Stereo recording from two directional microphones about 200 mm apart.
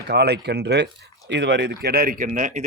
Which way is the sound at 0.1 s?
55° right (ahead or behind).